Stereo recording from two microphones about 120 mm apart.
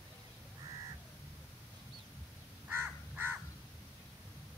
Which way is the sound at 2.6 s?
15° right (ahead or behind).